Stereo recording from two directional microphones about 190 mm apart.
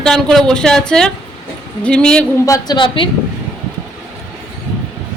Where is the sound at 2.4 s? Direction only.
20° left (ahead or behind).